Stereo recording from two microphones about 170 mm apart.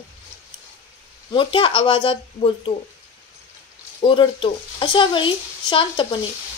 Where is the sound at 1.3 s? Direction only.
30° left (ahead or behind).